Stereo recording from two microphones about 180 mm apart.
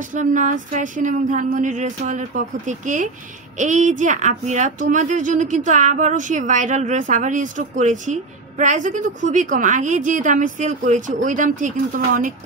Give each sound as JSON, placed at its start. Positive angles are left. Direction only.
{"t": 0.1, "sound": "speech", "side_deg": -45}